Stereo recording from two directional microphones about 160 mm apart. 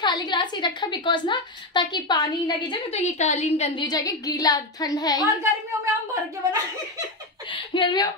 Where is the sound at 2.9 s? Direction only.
45° left (ahead or behind).